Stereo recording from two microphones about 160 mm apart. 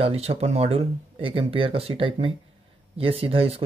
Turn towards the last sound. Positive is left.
turn(degrees=-35)  # may be behind; listen again after turning